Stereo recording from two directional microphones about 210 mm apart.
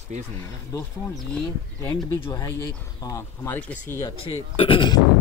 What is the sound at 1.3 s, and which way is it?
Speech, 5° left (ahead or behind).